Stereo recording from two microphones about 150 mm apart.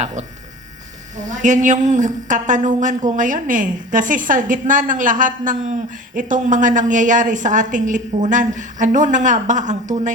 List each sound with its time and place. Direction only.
1.1 s a woman's voice: 55° right (ahead or behind)